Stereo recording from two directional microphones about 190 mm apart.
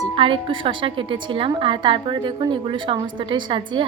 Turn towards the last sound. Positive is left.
turn(degrees=-25)  # may be behind; listen again after turning